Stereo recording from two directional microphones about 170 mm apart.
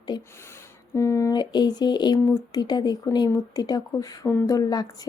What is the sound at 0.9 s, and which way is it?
Speech, 15° left (ahead or behind).